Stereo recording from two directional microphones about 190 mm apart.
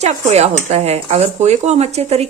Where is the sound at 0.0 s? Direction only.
35° right (ahead or behind).